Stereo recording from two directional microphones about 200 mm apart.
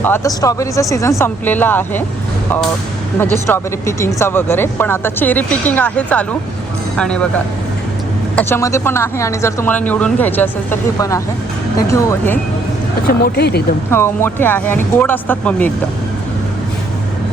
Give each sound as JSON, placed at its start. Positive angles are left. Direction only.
{"t": 0.0, "sound": "speech", "side_deg": 15}
{"t": 3.2, "sound": "speech", "side_deg": 10}
{"t": 13.1, "sound": "speech", "side_deg": 55}
{"t": 13.9, "sound": "speech", "side_deg": 10}